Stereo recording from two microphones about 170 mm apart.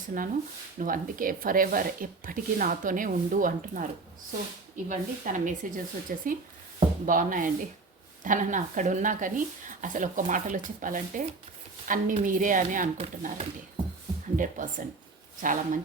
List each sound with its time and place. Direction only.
0.8 s speech: 55° right (ahead or behind)
4.9 s speech: 45° right (ahead or behind)